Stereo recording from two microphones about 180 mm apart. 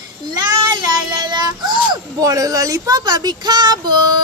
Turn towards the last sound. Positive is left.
turn(degrees=-25)  # may be behind; listen again after turning